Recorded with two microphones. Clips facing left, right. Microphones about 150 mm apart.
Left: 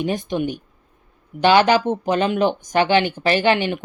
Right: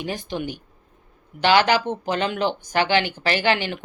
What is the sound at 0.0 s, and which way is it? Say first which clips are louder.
Speech: left 6 dB; 20° left (ahead or behind).